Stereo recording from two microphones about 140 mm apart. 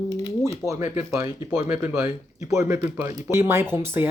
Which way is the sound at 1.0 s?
20° right (ahead or behind).